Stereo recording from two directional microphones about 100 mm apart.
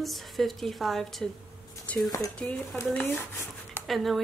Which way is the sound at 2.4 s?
5° left (ahead or behind).